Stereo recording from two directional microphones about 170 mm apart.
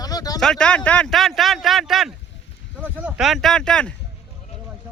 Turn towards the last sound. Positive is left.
turn(degrees=5)  # may be behind; listen again after turning